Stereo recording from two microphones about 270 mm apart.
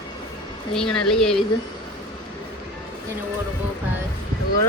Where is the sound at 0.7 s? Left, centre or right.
Centre.